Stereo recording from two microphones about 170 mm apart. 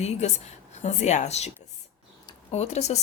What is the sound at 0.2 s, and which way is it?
Speech, 40° left (ahead or behind).